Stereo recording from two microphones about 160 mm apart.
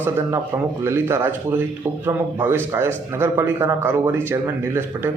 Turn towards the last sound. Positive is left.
turn(degrees=-15)  # may be behind; listen again after turning